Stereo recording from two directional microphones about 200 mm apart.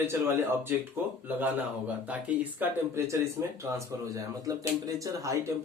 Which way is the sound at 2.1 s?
10° right (ahead or behind).